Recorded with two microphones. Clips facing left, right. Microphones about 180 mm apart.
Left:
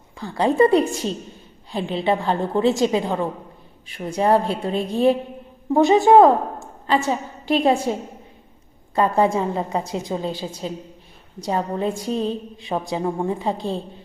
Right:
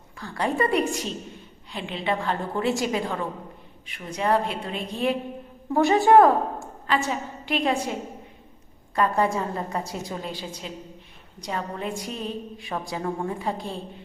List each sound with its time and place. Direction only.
0.2 s a woman's voice: 25° left (ahead or behind)
5.7 s a woman's voice: 20° left (ahead or behind)
6.8 s a woman's voice: 30° left (ahead or behind)
9.0 s a woman's voice: 25° left (ahead or behind)